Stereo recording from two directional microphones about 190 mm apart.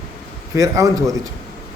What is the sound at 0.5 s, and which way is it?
Speech, 15° right (ahead or behind).